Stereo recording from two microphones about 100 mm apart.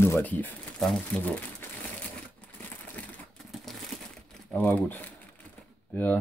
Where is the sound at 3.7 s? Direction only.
Centre (ahead or behind).